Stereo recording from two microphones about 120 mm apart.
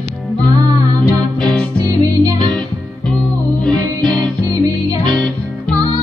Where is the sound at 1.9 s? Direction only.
30° right (ahead or behind).